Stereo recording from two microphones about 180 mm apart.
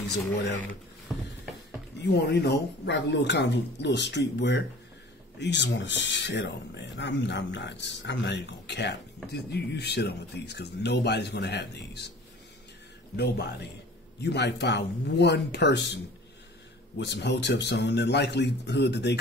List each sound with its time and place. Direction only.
2.0 s speech: 70° left (ahead or behind)
13.1 s speech: 65° left (ahead or behind)
17.0 s speech: 70° left (ahead or behind)